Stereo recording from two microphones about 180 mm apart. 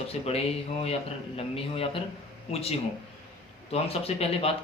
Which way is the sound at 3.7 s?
35° left (ahead or behind).